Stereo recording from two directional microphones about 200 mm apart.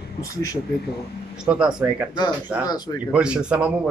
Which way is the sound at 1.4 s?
5° right (ahead or behind).